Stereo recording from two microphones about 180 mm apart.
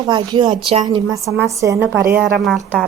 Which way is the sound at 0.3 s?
25° right (ahead or behind).